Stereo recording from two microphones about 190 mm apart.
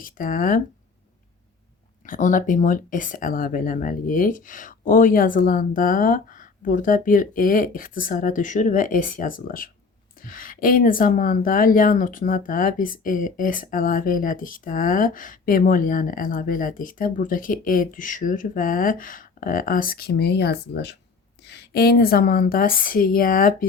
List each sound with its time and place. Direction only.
0.0 s speech: 45° left (ahead or behind)
2.0 s speech: 45° left (ahead or behind)